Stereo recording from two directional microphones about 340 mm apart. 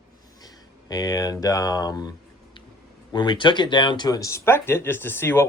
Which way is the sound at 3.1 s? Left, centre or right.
Centre.